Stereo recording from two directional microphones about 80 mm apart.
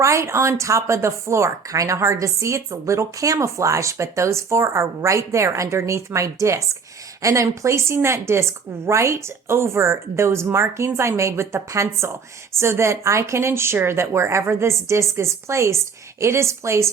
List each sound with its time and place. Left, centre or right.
0.0 s speech: right